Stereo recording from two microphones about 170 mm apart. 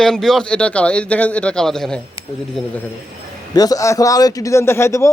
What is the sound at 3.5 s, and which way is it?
A man's voice, 20° left (ahead or behind).